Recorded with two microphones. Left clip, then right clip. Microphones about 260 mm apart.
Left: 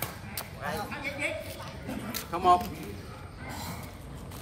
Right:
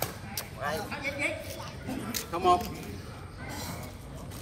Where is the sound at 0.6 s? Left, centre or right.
Centre.